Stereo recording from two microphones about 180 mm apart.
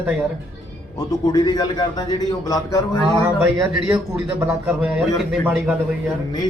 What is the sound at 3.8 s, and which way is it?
A man's voice, centre (ahead or behind).